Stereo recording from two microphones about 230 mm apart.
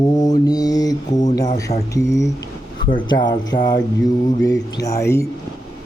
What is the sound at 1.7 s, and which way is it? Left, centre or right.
Speech, left.